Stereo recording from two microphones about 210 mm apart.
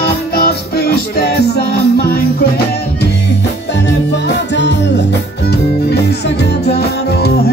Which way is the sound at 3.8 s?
55° left (ahead or behind).